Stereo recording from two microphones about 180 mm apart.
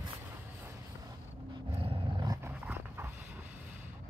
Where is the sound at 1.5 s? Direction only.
30° right (ahead or behind).